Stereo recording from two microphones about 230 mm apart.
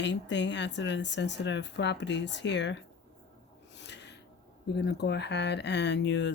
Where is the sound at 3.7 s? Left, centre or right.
Left.